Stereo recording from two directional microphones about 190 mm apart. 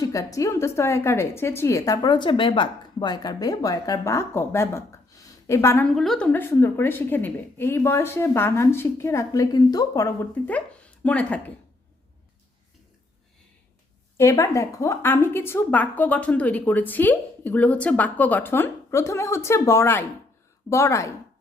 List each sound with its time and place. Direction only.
0.0 s a woman's voice: 15° left (ahead or behind)
5.9 s a woman's voice: centre (ahead or behind)
14.2 s a woman's voice: 15° left (ahead or behind)